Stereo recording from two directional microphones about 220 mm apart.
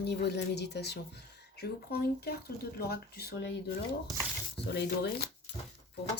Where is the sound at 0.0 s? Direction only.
50° left (ahead or behind).